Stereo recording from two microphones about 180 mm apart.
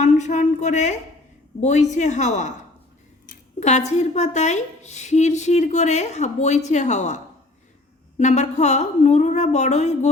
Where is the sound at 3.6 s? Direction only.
40° left (ahead or behind).